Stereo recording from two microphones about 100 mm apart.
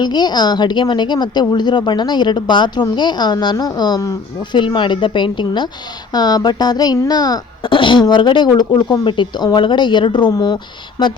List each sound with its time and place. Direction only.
0.0 s speech: 45° left (ahead or behind)